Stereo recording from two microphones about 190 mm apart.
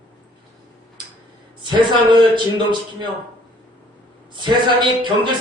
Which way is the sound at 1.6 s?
25° right (ahead or behind).